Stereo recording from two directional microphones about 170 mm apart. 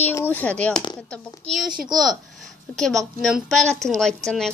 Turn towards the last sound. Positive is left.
turn(degrees=5)  # may be behind; listen again after turning